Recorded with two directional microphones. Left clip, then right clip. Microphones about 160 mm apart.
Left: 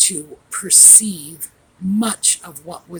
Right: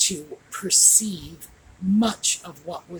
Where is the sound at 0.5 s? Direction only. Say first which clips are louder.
Left 6 dB; 45° left (ahead or behind).